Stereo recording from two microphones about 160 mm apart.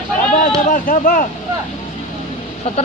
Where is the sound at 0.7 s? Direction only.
60° left (ahead or behind).